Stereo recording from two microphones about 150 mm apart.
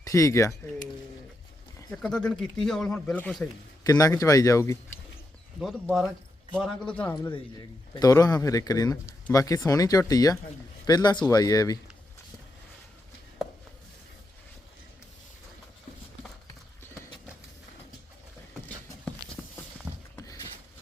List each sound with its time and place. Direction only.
0.0 s speech: 20° left (ahead or behind)
1.9 s speech: 5° left (ahead or behind)
3.8 s speech: 20° left (ahead or behind)
6.5 s a man's voice: 5° left (ahead or behind)
7.3 s speech: 30° left (ahead or behind)
19.4 s a sound: 5° left (ahead or behind)
20.1 s a sound: 20° left (ahead or behind)